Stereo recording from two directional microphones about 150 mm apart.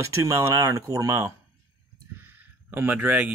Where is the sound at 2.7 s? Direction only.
10° right (ahead or behind).